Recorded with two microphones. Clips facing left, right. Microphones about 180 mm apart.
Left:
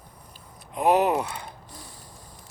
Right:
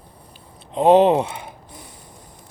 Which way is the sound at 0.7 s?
25° right (ahead or behind).